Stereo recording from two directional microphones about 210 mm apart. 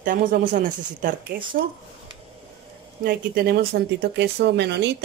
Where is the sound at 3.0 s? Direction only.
50° right (ahead or behind).